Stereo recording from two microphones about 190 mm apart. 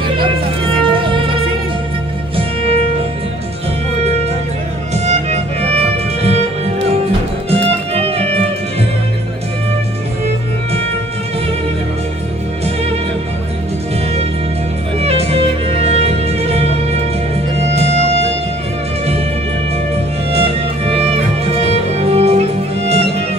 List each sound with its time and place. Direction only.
0.2 s music: 25° right (ahead or behind)
2.3 s music: 30° right (ahead or behind)
4.9 s music: 35° right (ahead or behind)
15.0 s music: 35° right (ahead or behind)
20.3 s music: 30° right (ahead or behind)